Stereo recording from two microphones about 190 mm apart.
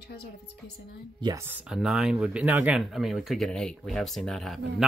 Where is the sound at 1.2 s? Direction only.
15° right (ahead or behind).